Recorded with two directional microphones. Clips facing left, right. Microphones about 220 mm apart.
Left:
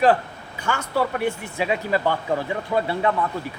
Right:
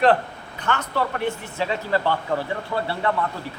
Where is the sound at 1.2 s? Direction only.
15° left (ahead or behind).